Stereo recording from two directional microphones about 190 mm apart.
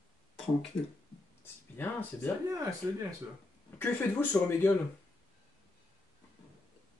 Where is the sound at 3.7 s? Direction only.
10° left (ahead or behind).